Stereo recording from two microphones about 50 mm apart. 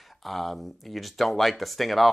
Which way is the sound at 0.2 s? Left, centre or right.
Centre.